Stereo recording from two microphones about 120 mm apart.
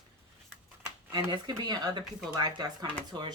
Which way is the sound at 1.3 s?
35° right (ahead or behind).